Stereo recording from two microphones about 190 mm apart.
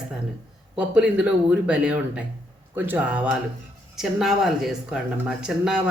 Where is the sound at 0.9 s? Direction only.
5° right (ahead or behind).